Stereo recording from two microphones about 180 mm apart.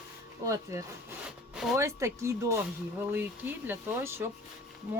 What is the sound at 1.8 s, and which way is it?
Speech, 15° right (ahead or behind).